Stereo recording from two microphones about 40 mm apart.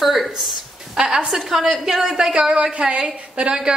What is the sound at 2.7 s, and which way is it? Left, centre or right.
A woman's voice, right.